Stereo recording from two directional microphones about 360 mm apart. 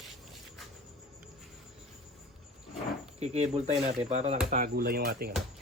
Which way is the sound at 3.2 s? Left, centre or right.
Centre.